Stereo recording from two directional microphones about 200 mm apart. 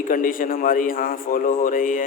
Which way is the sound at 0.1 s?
45° left (ahead or behind).